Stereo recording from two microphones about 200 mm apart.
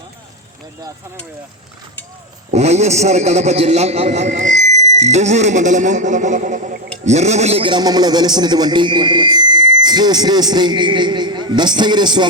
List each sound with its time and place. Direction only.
2.5 s a man's voice: 35° right (ahead or behind)